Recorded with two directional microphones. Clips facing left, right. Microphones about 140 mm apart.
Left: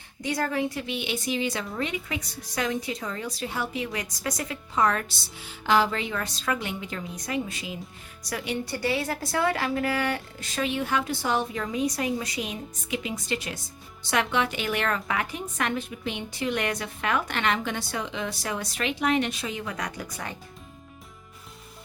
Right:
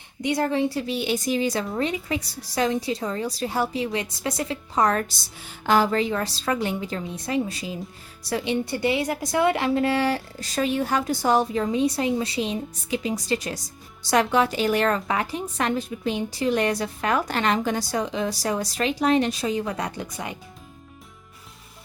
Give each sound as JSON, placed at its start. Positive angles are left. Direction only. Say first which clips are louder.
{"t": 0.2, "sound": "a woman's voice", "louder": "right 4 dB", "side_deg": -20}